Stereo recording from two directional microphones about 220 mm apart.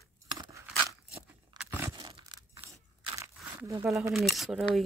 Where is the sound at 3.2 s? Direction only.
15° right (ahead or behind).